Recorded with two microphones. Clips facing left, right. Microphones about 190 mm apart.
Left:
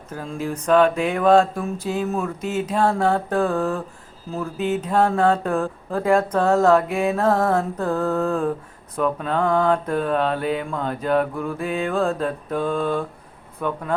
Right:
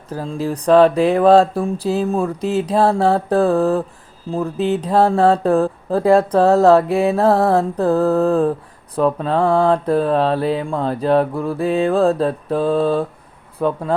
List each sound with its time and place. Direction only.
0.1 s speech: 35° right (ahead or behind)